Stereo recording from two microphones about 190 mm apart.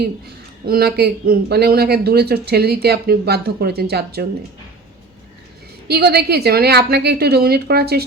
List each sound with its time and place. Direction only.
0.6 s speech: 50° right (ahead or behind)
5.9 s speech: 60° right (ahead or behind)